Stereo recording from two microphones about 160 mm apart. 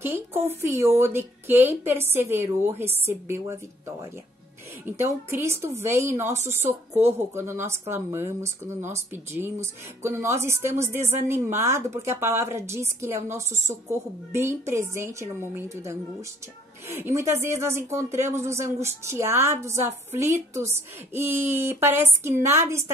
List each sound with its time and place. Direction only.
0.0 s speech: 15° right (ahead or behind)
6.3 s a woman's voice: 45° right (ahead or behind)
6.9 s speech: 15° right (ahead or behind)
16.9 s speech: 20° right (ahead or behind)